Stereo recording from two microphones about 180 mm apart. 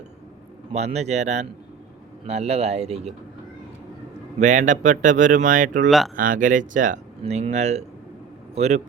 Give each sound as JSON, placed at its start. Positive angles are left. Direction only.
{"t": 0.7, "sound": "speech", "side_deg": -35}
{"t": 4.4, "sound": "speech", "side_deg": -45}